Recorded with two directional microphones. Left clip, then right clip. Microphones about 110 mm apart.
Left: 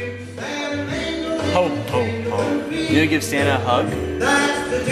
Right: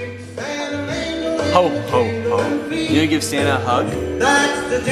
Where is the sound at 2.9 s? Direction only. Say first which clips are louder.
Even; 15° right (ahead or behind).